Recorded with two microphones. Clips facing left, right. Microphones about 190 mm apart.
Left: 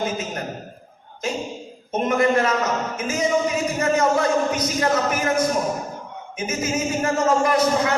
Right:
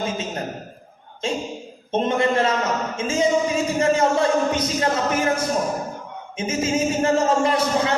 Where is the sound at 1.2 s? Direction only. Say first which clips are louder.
Right 1 dB; 30° right (ahead or behind).